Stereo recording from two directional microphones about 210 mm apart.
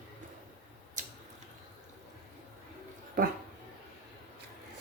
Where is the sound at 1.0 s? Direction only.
35° right (ahead or behind).